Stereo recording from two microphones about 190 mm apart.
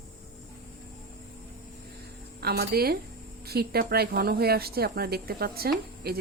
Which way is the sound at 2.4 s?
55° right (ahead or behind).